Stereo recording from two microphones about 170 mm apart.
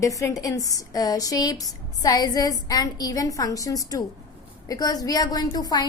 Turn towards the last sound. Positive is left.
turn(degrees=25)  # may be behind; listen again after turning